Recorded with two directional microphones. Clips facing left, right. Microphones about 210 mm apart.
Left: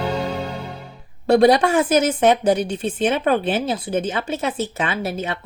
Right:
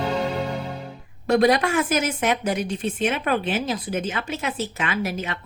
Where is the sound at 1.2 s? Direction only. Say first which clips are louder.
Left 4 dB; 30° left (ahead or behind).